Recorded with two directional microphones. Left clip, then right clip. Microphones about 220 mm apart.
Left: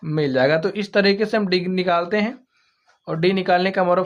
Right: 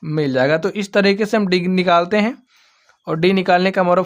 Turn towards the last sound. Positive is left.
turn(degrees=-35)  # may be behind; listen again after turning